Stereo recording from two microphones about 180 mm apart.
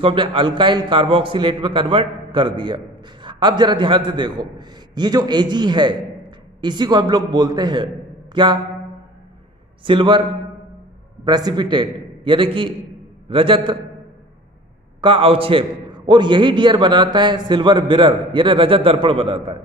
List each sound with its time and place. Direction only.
0.0 s a man's voice: 30° right (ahead or behind)
9.8 s a man's voice: 25° right (ahead or behind)
11.2 s a man's voice: 25° right (ahead or behind)
15.0 s a man's voice: 30° right (ahead or behind)